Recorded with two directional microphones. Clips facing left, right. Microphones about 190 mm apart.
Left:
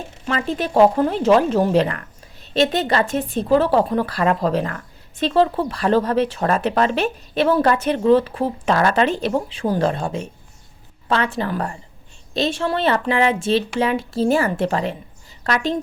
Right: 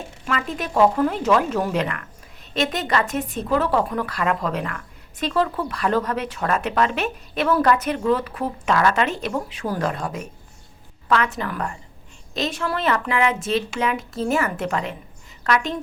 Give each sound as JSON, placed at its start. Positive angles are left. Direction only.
{"t": 0.3, "sound": "a woman's voice", "side_deg": 30}